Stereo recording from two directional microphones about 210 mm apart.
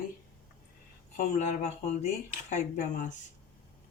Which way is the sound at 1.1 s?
35° left (ahead or behind).